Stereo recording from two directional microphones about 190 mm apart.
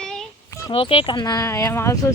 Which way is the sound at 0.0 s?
5° left (ahead or behind).